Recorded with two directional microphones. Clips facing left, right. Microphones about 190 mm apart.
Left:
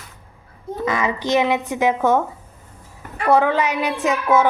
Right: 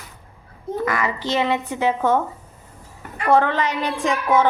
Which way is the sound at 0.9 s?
20° left (ahead or behind).